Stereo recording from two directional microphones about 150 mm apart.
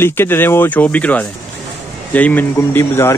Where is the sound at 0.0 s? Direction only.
15° left (ahead or behind).